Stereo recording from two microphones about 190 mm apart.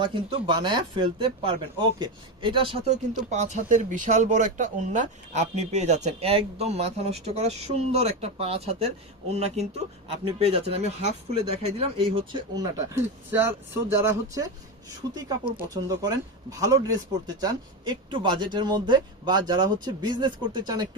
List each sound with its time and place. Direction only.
0.0 s speech: 25° right (ahead or behind)